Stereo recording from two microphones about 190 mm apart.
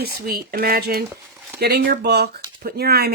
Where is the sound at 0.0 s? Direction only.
55° right (ahead or behind).